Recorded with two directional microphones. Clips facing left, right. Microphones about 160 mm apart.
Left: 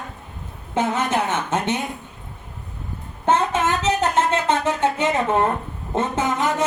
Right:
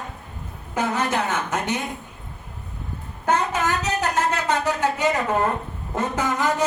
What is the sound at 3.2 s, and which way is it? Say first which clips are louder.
Speech: left 3 dB; 25° left (ahead or behind).